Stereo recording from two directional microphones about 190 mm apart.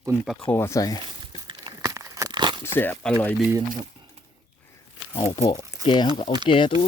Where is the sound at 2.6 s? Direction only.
10° left (ahead or behind).